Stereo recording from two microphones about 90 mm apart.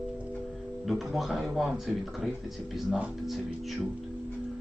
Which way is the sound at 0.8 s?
Centre (ahead or behind).